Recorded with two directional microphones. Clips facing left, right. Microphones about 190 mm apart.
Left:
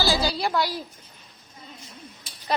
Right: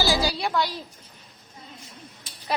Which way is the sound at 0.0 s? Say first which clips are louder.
Even; 15° right (ahead or behind).